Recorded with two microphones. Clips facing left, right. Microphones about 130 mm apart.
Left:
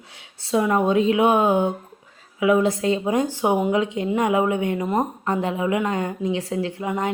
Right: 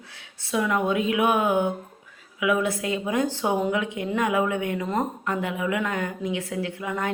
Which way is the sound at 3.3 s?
15° left (ahead or behind).